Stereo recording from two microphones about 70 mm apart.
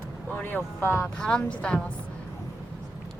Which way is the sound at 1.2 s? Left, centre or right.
Centre.